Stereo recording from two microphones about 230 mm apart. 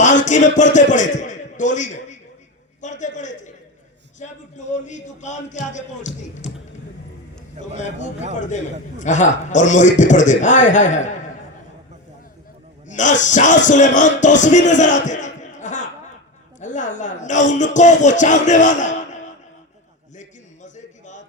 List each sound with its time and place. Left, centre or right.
0.0 s a man's voice: left
9.0 s a man's voice: left
12.9 s a man's voice: left
20.1 s a sound: left